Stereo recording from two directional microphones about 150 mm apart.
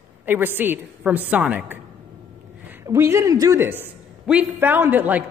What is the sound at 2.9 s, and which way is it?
A man's voice, 20° right (ahead or behind).